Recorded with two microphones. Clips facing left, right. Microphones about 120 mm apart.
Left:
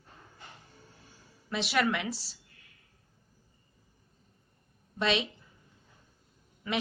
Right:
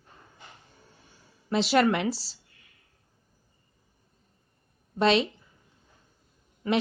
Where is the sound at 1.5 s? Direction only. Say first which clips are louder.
Right 7 dB; 30° right (ahead or behind).